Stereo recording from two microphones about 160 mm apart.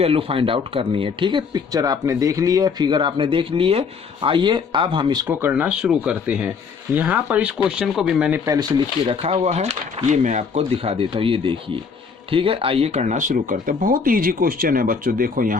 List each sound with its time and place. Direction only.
0.0 s speech: 35° right (ahead or behind)
5.3 s speech: 10° right (ahead or behind)
9.0 s speech: 40° right (ahead or behind)
10.6 s speech: 35° right (ahead or behind); by 15.5 s 60° right (ahead or behind)